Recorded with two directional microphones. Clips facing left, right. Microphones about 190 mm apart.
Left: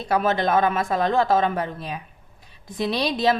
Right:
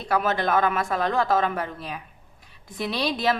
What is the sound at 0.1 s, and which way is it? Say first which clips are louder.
A woman's voice: left 2 dB; 25° left (ahead or behind).